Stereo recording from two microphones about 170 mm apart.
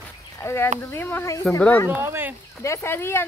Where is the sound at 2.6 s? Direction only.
15° left (ahead or behind).